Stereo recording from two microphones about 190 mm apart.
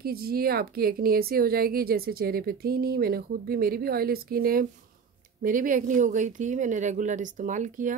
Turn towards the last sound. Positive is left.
turn(degrees=-40)  # may be behind; listen again after turning